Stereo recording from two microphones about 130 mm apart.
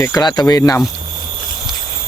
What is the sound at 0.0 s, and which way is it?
Speech, 30° left (ahead or behind).